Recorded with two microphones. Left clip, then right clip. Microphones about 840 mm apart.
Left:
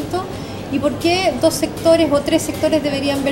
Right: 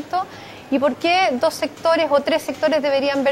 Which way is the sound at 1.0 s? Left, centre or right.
Right.